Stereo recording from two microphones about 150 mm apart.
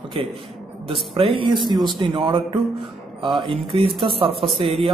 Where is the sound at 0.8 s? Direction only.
35° right (ahead or behind).